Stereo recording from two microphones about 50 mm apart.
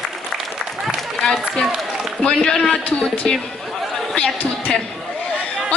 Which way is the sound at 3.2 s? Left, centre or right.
Left.